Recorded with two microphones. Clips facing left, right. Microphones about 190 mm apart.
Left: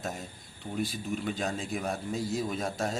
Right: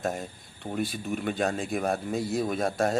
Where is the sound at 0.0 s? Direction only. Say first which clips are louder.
Right 6 dB; 55° right (ahead or behind).